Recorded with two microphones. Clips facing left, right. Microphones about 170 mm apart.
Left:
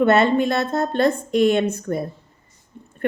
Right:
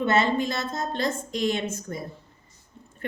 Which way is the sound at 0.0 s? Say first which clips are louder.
Left 7 dB; 60° left (ahead or behind).